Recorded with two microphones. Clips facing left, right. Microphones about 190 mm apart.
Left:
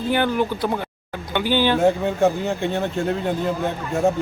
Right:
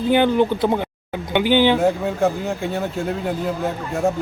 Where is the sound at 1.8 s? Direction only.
5° right (ahead or behind).